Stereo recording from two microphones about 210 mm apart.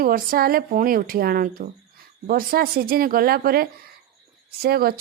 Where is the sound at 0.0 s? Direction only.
45° right (ahead or behind).